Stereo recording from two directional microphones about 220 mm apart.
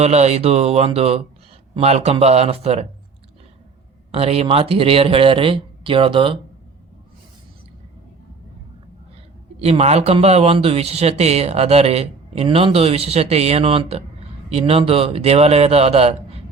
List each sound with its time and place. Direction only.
0.0 s speech: 30° right (ahead or behind)
4.1 s speech: 25° right (ahead or behind)
9.6 s speech: 30° right (ahead or behind)